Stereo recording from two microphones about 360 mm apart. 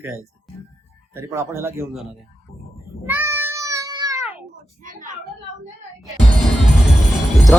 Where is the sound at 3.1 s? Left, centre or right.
Centre.